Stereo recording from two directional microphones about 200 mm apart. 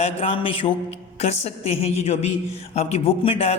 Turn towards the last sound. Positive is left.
turn(degrees=30)  # may be behind; listen again after turning